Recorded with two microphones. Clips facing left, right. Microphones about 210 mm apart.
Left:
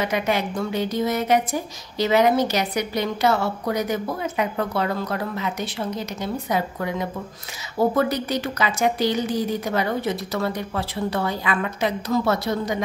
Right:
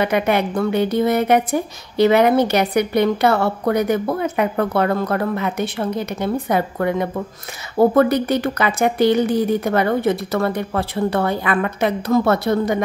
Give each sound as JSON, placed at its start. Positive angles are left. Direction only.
{"t": 0.0, "sound": "a woman's voice", "side_deg": -60}